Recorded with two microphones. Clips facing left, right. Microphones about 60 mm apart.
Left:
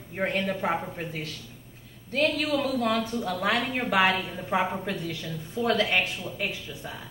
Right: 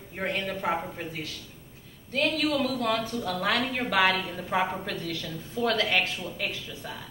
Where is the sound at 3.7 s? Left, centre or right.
Centre.